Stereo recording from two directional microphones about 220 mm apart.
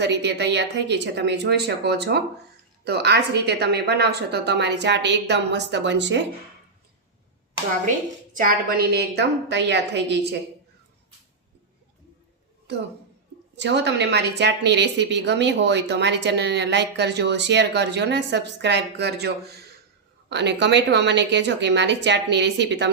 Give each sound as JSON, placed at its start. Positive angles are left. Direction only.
{"t": 0.0, "sound": "a woman's voice", "side_deg": -50}
{"t": 8.4, "sound": "a woman's voice", "side_deg": -40}
{"t": 13.6, "sound": "a woman's voice", "side_deg": -50}